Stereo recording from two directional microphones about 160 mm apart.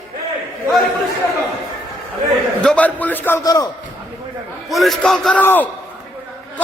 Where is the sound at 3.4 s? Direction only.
25° left (ahead or behind).